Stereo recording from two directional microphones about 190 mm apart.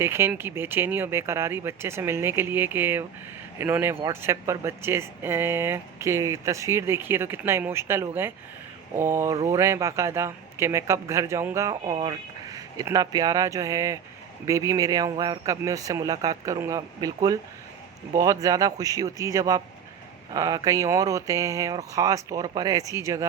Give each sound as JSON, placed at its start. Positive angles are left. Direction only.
{"t": 0.0, "sound": "speech", "side_deg": -10}
{"t": 18.1, "sound": "speech", "side_deg": -20}